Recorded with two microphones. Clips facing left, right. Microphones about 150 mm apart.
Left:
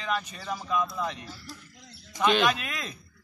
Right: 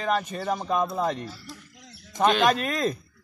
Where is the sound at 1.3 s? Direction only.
Centre (ahead or behind).